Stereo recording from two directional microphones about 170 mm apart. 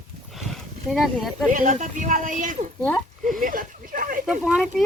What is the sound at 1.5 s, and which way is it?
Speech, 45° right (ahead or behind).